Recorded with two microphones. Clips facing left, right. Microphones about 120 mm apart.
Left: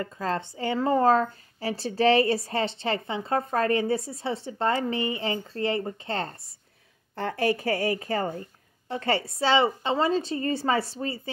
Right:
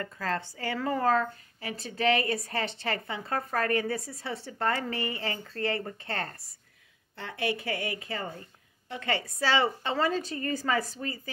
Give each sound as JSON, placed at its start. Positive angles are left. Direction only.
{"t": 0.0, "sound": "a woman's voice", "side_deg": 20}
{"t": 7.2, "sound": "a woman's voice", "side_deg": 45}